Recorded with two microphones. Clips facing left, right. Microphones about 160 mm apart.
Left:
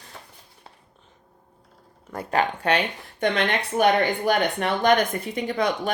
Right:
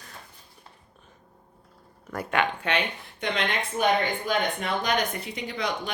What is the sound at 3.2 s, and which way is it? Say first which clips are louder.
Speech: left 5 dB; 60° left (ahead or behind).